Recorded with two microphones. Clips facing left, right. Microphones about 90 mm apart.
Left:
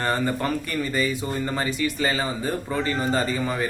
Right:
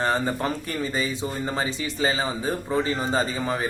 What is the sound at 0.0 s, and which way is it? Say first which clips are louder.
Speech: even; 20° right (ahead or behind).